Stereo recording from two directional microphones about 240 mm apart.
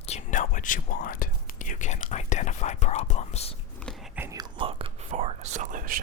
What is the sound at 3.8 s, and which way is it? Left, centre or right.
Whispering, centre.